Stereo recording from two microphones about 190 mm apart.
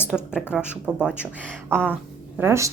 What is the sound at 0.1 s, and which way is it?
A woman's voice, 5° left (ahead or behind).